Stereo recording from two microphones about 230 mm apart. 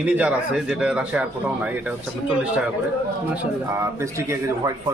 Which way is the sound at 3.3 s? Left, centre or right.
Centre.